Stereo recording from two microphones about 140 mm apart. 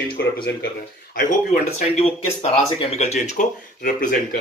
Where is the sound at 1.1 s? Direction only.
70° left (ahead or behind).